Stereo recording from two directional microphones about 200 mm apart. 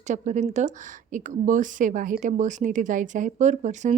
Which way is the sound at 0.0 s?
35° right (ahead or behind).